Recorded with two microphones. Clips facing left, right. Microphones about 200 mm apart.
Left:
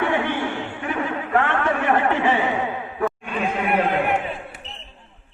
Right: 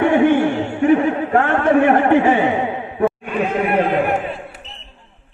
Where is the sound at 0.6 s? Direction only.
30° right (ahead or behind).